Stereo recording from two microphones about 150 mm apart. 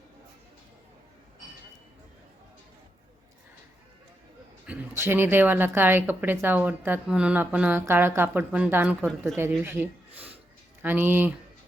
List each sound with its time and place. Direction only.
4.6 s a woman's voice: 10° right (ahead or behind)
9.6 s a sound: 15° right (ahead or behind)
10.8 s a woman's voice: 15° right (ahead or behind)